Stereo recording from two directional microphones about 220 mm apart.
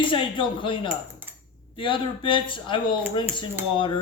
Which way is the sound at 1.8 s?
25° left (ahead or behind).